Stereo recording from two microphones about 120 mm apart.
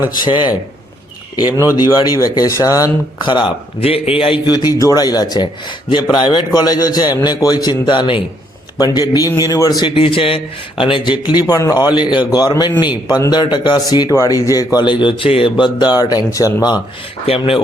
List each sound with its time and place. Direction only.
0.1 s a man's voice: 40° left (ahead or behind)
1.7 s a man's voice: 35° left (ahead or behind)
4.4 s a man's voice: 35° left (ahead or behind)
17.2 s speech: 55° left (ahead or behind)